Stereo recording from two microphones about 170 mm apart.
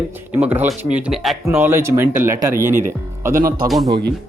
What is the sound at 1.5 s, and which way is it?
Speech, 15° right (ahead or behind).